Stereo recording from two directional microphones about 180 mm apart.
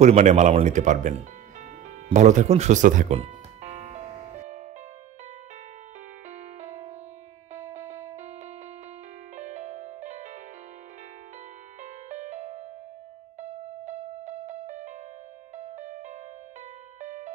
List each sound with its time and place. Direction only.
0.0 s speech: 40° right (ahead or behind)
2.0 s music: 40° right (ahead or behind)
6.3 s music: 40° right (ahead or behind)
9.4 s music: 40° right (ahead or behind)
11.8 s music: 40° right (ahead or behind)